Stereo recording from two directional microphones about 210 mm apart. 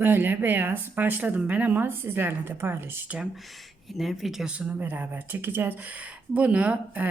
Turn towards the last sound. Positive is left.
turn(degrees=-5)  # may be behind; listen again after turning